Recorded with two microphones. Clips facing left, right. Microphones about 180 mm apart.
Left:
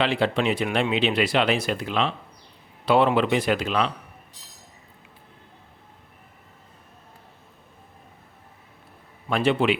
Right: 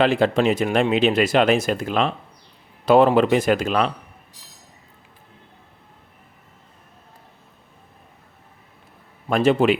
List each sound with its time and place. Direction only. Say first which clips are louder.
0.0 s speech: right 5 dB; 45° right (ahead or behind)
9.3 s speech: right 4 dB; 45° right (ahead or behind)